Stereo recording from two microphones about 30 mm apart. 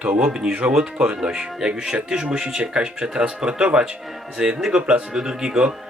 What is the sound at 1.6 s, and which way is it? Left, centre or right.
Speech, right.